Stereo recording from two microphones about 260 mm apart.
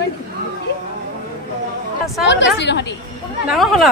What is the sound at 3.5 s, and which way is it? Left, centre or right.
Speech, centre.